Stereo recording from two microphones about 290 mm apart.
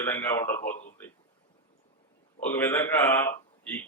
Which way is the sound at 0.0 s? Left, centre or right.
Centre.